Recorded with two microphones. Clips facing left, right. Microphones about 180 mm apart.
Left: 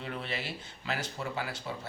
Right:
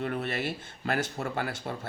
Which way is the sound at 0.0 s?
50° right (ahead or behind).